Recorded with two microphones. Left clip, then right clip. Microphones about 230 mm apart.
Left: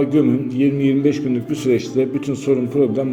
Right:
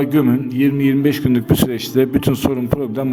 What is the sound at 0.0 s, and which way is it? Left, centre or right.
A man's voice, right.